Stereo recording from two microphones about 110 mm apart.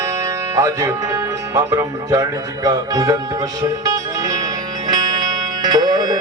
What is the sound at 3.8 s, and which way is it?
Music, 30° right (ahead or behind).